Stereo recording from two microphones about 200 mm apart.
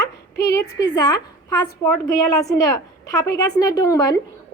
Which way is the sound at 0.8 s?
20° left (ahead or behind).